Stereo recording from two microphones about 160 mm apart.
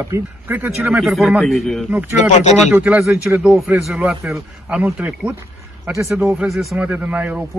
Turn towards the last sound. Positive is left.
turn(degrees=-10)  # may be behind; listen again after turning